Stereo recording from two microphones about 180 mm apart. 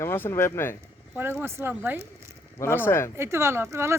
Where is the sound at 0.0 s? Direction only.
15° left (ahead or behind).